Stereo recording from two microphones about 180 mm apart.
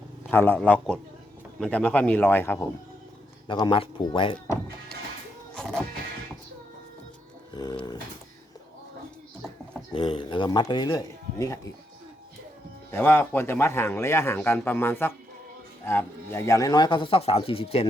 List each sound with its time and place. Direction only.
0.3 s a man's voice: 10° left (ahead or behind)
3.4 s speech: 25° left (ahead or behind)
7.5 s speech: 20° left (ahead or behind)
9.9 s speech: 30° left (ahead or behind)
12.9 s a man's voice: 10° left (ahead or behind); by 17.8 s 30° left (ahead or behind)